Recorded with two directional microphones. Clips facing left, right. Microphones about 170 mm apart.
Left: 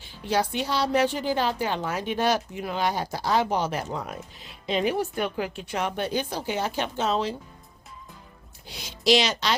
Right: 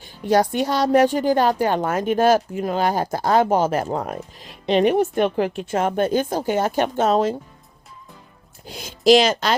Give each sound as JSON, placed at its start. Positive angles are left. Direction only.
{"t": 0.0, "sound": "a woman's voice", "side_deg": -45}
{"t": 4.6, "sound": "a woman's voice", "side_deg": -65}
{"t": 5.1, "sound": "a woman's voice", "side_deg": -45}
{"t": 8.6, "sound": "speech", "side_deg": -50}